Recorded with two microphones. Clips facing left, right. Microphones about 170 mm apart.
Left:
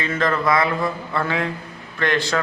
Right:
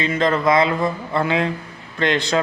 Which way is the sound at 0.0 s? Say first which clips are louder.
Right 3 dB; 20° right (ahead or behind).